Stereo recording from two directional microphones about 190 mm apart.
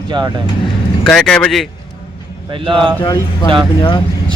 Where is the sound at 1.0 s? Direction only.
5° left (ahead or behind).